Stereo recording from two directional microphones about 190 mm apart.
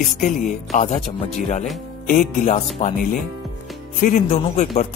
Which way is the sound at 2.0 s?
45° left (ahead or behind).